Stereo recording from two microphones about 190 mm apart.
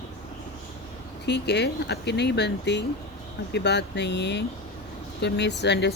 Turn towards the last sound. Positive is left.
turn(degrees=65)  # may be behind; listen again after turning